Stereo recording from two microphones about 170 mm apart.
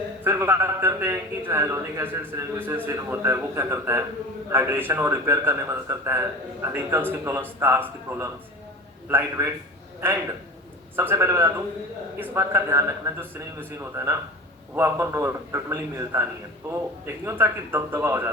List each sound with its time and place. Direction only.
0.3 s a man's voice: 15° right (ahead or behind)
10.9 s a man's voice: 15° right (ahead or behind)
17.2 s a man's voice: 10° right (ahead or behind)